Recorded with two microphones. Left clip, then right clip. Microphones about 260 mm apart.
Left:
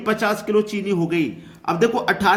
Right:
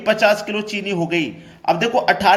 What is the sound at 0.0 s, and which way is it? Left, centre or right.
A man's voice, centre.